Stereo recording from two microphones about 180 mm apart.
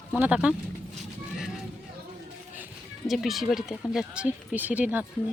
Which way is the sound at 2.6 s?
Centre (ahead or behind).